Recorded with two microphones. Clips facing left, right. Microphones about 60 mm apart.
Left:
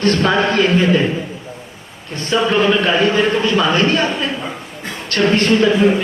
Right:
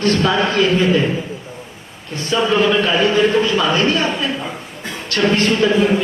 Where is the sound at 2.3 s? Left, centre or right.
Left.